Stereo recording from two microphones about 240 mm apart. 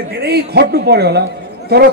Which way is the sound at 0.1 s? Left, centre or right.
Right.